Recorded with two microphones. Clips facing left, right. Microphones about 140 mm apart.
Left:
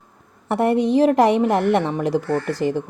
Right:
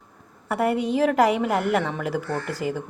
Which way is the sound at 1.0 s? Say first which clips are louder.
Left 1 dB; 30° left (ahead or behind).